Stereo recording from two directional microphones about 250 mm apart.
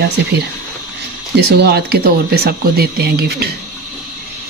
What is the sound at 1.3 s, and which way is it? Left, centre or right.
Speech, right.